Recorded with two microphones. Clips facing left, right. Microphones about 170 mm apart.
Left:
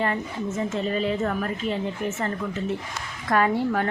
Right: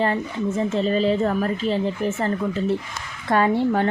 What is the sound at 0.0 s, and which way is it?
A woman's voice, 30° right (ahead or behind).